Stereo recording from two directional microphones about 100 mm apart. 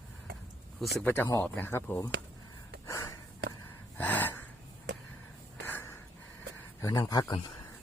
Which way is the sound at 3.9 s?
15° left (ahead or behind).